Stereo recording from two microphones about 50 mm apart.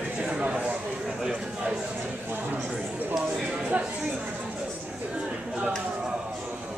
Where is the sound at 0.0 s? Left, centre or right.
Centre.